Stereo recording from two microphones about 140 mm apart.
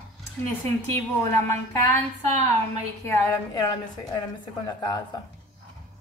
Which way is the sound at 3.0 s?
15° left (ahead or behind).